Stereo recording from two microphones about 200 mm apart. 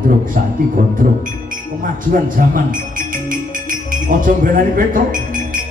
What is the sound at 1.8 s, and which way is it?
A man's voice, 40° right (ahead or behind).